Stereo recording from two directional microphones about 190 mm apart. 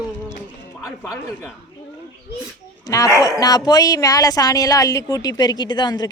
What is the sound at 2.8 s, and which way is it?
Speech, 15° left (ahead or behind).